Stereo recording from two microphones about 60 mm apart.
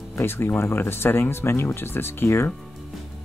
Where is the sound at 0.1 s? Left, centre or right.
Left.